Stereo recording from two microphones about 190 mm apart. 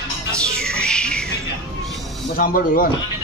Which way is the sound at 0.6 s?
5° left (ahead or behind).